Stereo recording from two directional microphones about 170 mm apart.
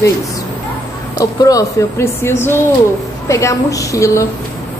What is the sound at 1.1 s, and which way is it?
A woman's voice, 20° left (ahead or behind).